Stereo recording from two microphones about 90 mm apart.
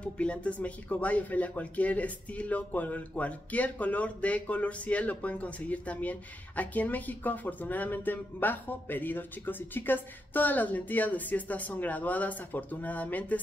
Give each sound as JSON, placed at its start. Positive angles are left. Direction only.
{"t": 0.0, "sound": "speech", "side_deg": 15}